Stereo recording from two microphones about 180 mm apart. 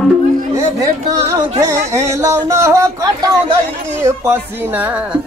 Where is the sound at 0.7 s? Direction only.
15° right (ahead or behind).